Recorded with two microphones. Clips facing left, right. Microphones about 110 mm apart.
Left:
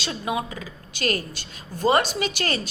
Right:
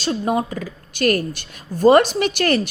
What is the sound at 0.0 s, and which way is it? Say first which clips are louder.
A woman's voice: right 7 dB; 45° right (ahead or behind).